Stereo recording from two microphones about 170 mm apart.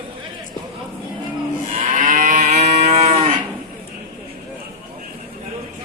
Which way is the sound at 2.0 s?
50° right (ahead or behind).